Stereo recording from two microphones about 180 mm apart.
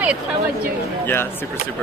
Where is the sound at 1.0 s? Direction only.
10° left (ahead or behind).